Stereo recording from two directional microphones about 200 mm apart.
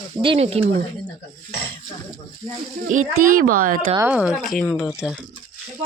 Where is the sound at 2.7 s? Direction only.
40° right (ahead or behind).